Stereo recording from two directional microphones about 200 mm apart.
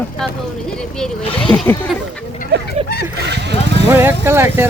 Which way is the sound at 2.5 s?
55° right (ahead or behind).